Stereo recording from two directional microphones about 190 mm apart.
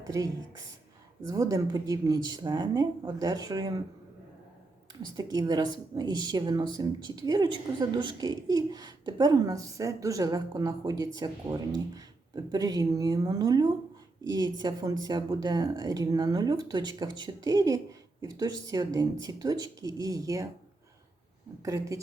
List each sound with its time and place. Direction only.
0.0 s speech: 20° right (ahead or behind)
5.1 s speech: 20° right (ahead or behind)
21.6 s speech: 15° right (ahead or behind)